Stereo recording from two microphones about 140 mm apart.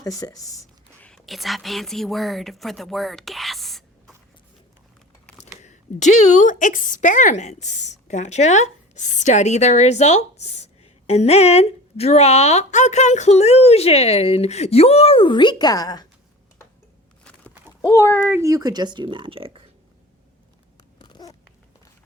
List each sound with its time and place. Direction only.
0.0 s speech: 25° left (ahead or behind)
1.0 s speech: centre (ahead or behind)
5.6 s a woman's voice: 60° left (ahead or behind); by 16.0 s 30° left (ahead or behind)
18.3 s speech: 20° right (ahead or behind); by 19.6 s 40° right (ahead or behind)
21.0 s babbling: 30° left (ahead or behind)